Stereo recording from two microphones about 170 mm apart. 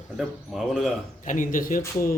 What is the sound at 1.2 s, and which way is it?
Speech, 50° left (ahead or behind).